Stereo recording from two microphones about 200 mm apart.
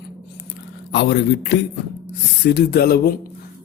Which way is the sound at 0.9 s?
55° left (ahead or behind).